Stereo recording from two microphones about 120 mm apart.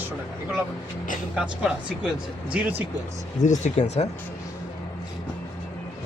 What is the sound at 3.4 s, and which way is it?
Speech, 90° left.